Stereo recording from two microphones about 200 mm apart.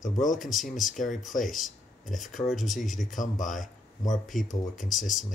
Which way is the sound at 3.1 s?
40° left (ahead or behind).